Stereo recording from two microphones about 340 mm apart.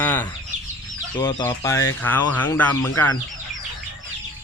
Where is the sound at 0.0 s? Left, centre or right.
Centre.